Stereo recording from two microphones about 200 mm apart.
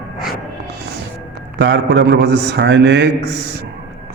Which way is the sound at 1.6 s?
55° right (ahead or behind).